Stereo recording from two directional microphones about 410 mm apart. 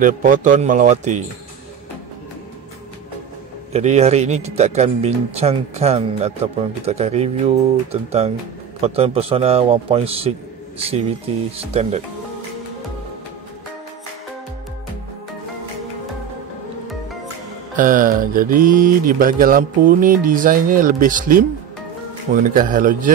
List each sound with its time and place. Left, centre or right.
0.0 s speech: centre
3.7 s speech: centre
17.7 s speech: centre